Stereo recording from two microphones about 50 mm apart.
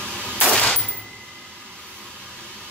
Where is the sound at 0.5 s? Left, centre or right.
Centre.